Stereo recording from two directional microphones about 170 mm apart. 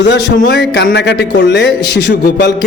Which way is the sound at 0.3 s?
70° left (ahead or behind).